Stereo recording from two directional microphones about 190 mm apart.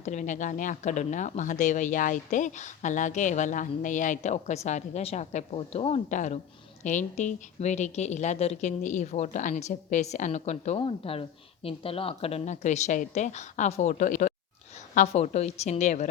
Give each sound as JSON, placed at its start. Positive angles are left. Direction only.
{"t": 0.0, "sound": "a woman's voice", "side_deg": 40}